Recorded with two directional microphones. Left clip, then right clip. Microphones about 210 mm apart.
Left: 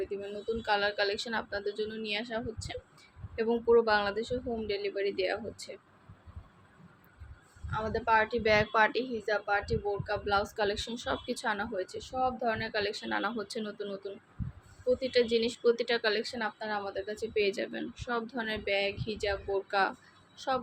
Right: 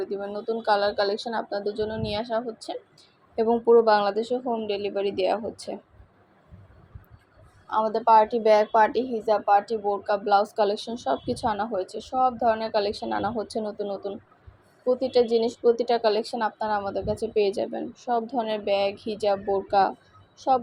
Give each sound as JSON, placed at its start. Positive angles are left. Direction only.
{"t": 0.0, "sound": "speech", "side_deg": -10}
{"t": 1.4, "sound": "speech", "side_deg": 15}
{"t": 1.6, "sound": "speech", "side_deg": -10}
{"t": 7.7, "sound": "speech", "side_deg": -20}
{"t": 13.1, "sound": "speech", "side_deg": 15}
{"t": 13.4, "sound": "speech", "side_deg": 0}